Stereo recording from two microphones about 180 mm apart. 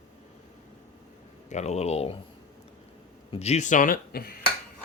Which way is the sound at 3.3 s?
35° left (ahead or behind).